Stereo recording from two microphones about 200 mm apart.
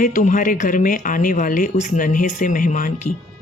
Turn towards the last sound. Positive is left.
turn(degrees=40)  # may be behind; listen again after turning